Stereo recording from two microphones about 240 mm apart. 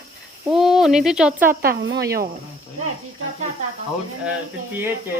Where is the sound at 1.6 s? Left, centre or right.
Right.